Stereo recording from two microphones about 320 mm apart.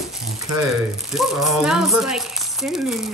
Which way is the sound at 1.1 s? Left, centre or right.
Centre.